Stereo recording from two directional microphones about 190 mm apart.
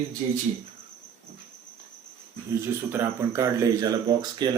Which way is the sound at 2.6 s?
10° right (ahead or behind).